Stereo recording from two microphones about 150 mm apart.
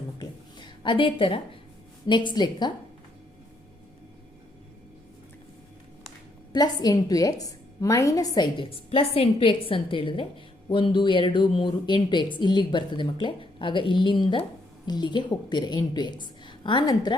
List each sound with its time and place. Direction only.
0.2 s a sound: 30° left (ahead or behind)
2.0 s a woman's voice: 30° left (ahead or behind)
6.5 s a woman's voice: 25° left (ahead or behind)